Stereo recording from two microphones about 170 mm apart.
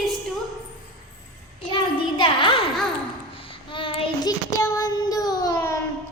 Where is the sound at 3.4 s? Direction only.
30° left (ahead or behind).